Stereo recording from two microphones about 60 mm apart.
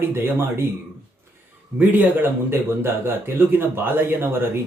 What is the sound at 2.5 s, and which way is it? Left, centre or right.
A man's voice, right.